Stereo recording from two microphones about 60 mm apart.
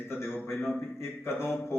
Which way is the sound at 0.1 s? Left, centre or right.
Left.